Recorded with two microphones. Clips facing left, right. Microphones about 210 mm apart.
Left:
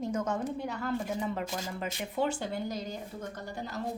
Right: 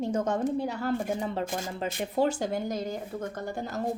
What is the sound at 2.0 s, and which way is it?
A woman's voice, 40° right (ahead or behind).